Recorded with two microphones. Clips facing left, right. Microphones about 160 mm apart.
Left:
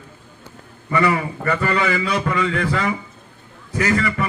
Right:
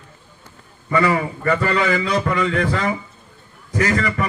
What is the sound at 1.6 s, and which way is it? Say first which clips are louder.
Speech: left 1 dB; 40° right (ahead or behind).